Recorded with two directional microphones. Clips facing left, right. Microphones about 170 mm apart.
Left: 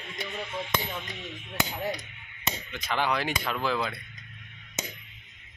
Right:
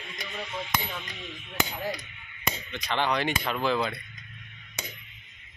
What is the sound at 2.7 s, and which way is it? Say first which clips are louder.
Speech: right 1 dB; 5° left (ahead or behind).